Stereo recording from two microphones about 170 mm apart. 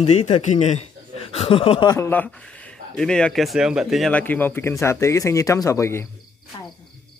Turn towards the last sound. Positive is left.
turn(degrees=15)  # may be behind; listen again after turning